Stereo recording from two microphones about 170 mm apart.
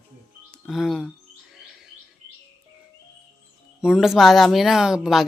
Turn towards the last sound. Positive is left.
turn(degrees=-5)  # may be behind; listen again after turning